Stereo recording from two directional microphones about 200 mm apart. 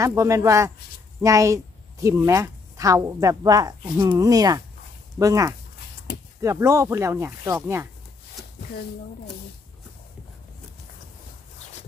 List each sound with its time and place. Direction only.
0.0 s speech: 15° right (ahead or behind)